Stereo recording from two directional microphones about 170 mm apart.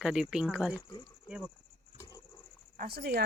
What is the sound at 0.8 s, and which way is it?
Speech, 25° left (ahead or behind).